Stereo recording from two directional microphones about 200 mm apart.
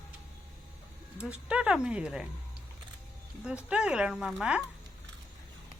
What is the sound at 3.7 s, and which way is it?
Speech, 5° right (ahead or behind).